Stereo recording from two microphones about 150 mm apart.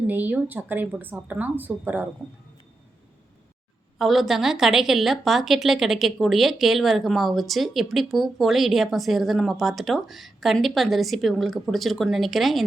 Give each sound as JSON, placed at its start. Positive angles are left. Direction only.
{"t": 0.1, "sound": "speech", "side_deg": -10}
{"t": 3.9, "sound": "a woman's voice", "side_deg": 0}